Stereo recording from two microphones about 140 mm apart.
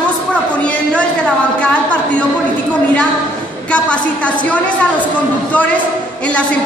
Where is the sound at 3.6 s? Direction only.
10° left (ahead or behind).